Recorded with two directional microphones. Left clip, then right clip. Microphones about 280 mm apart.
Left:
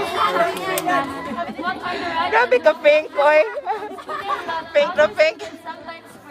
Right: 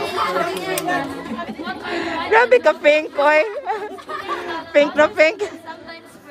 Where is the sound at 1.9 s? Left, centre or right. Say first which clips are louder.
Right 3 dB; right.